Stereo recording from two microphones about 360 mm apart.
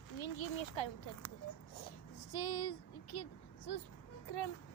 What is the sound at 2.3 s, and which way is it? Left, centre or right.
Speech, left.